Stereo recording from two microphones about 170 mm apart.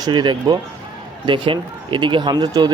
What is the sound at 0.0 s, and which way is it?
Speech, 25° right (ahead or behind).